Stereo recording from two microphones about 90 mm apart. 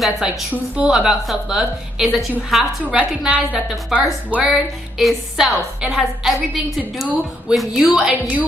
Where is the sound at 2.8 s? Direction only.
15° right (ahead or behind).